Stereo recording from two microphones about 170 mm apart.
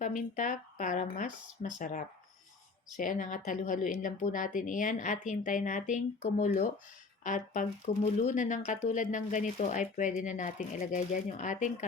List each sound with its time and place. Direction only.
0.0 s a woman's voice: 50° left (ahead or behind)